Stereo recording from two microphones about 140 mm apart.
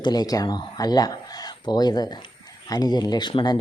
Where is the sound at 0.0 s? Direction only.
30° left (ahead or behind).